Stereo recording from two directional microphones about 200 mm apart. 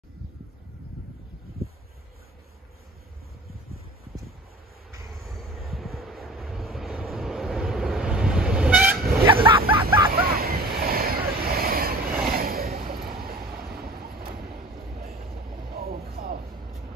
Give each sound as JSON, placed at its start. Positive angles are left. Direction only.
{"t": 5.3, "sound": "vehicle", "side_deg": 0}
{"t": 9.2, "sound": "a sound", "side_deg": -25}
{"t": 10.2, "sound": "waves", "side_deg": -50}
{"t": 12.3, "sound": "vehicle", "side_deg": -50}
{"t": 13.5, "sound": "train", "side_deg": -5}
{"t": 13.8, "sound": "train", "side_deg": -50}
{"t": 15.7, "sound": "vehicle", "side_deg": -50}